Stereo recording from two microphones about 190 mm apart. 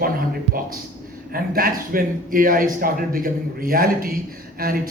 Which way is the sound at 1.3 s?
50° right (ahead or behind).